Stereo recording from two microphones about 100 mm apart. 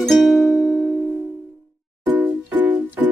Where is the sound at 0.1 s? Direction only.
Centre (ahead or behind).